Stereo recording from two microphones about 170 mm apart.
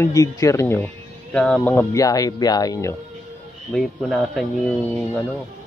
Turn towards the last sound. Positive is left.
turn(degrees=10)  # may be behind; listen again after turning